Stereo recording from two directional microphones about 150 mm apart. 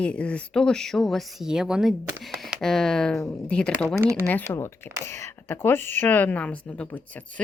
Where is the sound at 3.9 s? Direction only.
20° right (ahead or behind).